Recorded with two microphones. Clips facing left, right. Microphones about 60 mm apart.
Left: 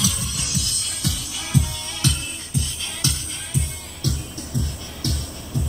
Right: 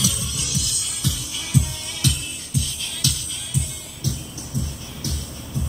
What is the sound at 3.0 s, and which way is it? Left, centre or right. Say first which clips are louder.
Music: even; left.